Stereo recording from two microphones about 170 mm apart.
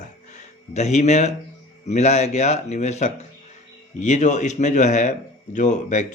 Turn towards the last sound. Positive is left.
turn(degrees=45)  # may be behind; listen again after turning